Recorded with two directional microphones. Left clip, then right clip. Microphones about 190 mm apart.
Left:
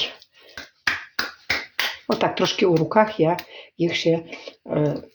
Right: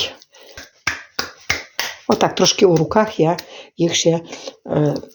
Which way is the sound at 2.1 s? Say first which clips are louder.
Right 6 dB; 40° right (ahead or behind).